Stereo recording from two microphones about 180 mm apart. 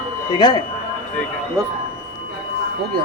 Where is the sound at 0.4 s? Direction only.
25° left (ahead or behind).